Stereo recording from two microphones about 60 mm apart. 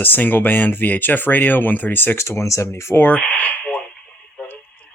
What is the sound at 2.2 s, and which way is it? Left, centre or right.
Speech, left.